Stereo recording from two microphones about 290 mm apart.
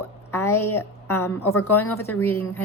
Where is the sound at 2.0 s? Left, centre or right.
Centre.